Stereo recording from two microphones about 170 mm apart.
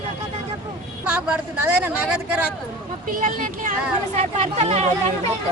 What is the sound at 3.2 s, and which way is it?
Speech, 55° right (ahead or behind).